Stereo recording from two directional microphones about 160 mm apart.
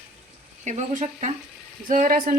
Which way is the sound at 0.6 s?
45° right (ahead or behind).